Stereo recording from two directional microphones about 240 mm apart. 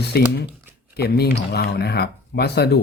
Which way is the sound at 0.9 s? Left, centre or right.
Left.